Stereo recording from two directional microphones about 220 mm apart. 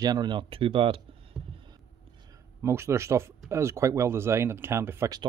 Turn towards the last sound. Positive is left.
turn(degrees=-10)  # may be behind; listen again after turning